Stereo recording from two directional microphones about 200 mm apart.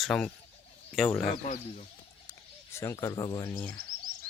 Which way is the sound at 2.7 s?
15° left (ahead or behind).